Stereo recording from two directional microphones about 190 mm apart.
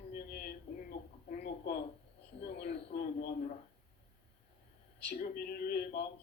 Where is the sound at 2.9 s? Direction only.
50° left (ahead or behind).